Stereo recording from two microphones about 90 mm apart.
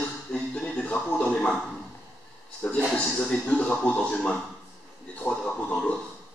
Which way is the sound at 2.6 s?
10° left (ahead or behind).